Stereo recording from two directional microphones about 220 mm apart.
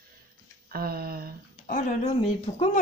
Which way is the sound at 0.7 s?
45° right (ahead or behind).